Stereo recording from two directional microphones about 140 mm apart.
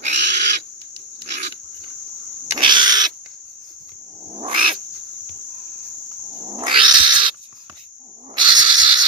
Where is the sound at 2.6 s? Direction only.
35° right (ahead or behind).